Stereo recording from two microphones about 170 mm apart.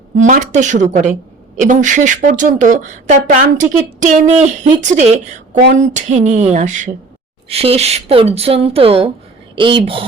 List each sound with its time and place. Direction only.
0.2 s speech: 45° right (ahead or behind)
7.4 s a woman's voice: 35° right (ahead or behind)